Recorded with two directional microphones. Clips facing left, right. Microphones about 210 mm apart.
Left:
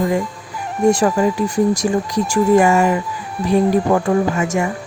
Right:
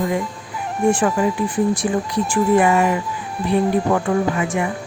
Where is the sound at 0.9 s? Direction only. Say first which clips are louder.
Left 3 dB; 40° left (ahead or behind).